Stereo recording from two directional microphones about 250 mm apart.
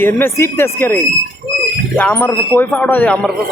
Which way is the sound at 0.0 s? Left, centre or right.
Centre.